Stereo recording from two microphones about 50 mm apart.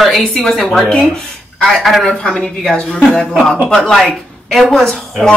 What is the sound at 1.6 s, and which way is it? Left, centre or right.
Speech, centre.